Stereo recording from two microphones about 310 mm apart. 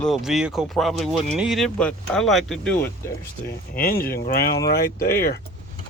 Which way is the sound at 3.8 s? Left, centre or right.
Left.